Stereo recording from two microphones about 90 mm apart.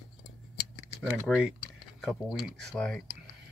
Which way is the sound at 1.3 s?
15° left (ahead or behind).